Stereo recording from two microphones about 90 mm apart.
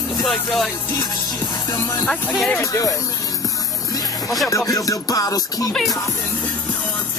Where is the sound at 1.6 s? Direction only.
35° left (ahead or behind).